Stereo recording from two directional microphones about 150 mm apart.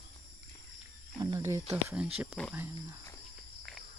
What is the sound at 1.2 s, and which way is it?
Speech, 25° right (ahead or behind).